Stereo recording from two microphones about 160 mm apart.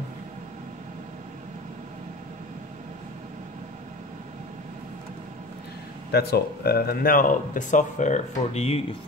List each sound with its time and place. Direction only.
6.1 s speech: 75° left (ahead or behind); by 8.8 s 40° left (ahead or behind)